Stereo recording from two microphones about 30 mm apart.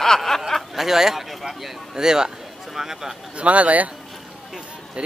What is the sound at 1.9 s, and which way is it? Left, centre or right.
Speech, right.